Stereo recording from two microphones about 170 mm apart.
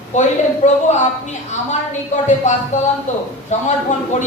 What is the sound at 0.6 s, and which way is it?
Speech, 40° left (ahead or behind).